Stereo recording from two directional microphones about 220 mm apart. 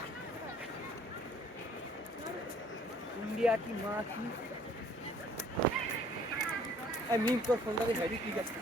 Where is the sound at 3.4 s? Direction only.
5° right (ahead or behind).